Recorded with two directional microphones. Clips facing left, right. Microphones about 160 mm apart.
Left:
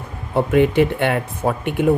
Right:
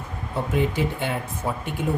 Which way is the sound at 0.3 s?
65° left (ahead or behind).